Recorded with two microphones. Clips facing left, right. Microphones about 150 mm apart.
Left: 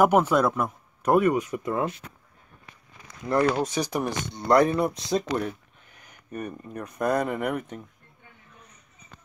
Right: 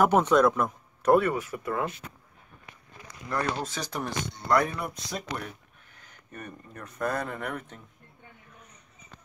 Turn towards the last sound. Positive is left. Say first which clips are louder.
# left 7 dB
turn(degrees=15)  # may be behind; listen again after turning